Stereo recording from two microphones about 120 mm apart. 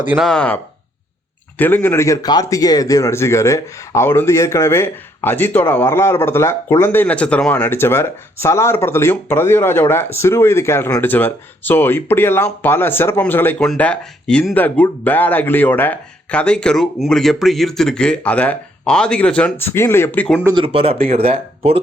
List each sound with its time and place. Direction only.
0.2 s speech: 5° left (ahead or behind)
20.5 s speech: 45° right (ahead or behind)